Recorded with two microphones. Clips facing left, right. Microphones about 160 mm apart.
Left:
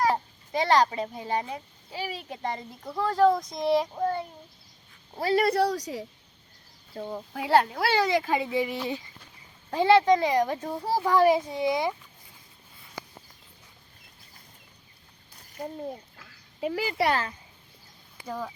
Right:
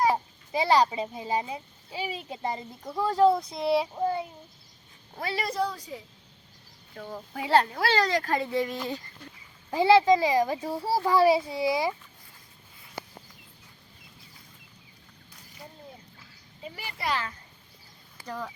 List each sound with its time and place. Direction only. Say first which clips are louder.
0.0 s a child's voice: even; 10° right (ahead or behind)
5.2 s a woman's voice: left 8 dB; 45° left (ahead or behind)
5.5 s a woman's voice: left 6 dB; 75° left (ahead or behind); by 6.1 s 90° left
6.9 s speech: left 4 dB; 20° left (ahead or behind)
7.3 s speech: left 1 dB; centre (ahead or behind)
9.6 s a child's voice: even; 5° right (ahead or behind)
15.6 s a woman's voice: left 12 dB; 45° left (ahead or behind)
16.1 s a sound: left 1 dB; 75° left (ahead or behind)
18.3 s speech: left 2 dB; 10° left (ahead or behind)